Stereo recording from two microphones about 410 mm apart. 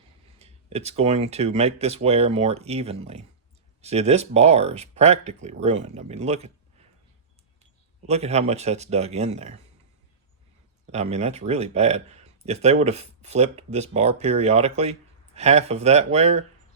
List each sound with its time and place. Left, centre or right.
0.3 s speech: centre
7.6 s speech: centre
10.9 s speech: centre